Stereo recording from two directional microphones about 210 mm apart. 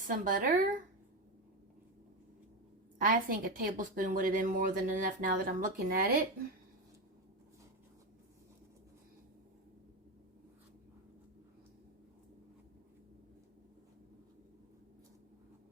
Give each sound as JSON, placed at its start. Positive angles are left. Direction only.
{"t": 0.1, "sound": "a woman's voice", "side_deg": -40}
{"t": 3.0, "sound": "a woman's voice", "side_deg": -40}